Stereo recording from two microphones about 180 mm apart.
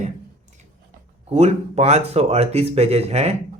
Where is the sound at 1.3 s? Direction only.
35° right (ahead or behind).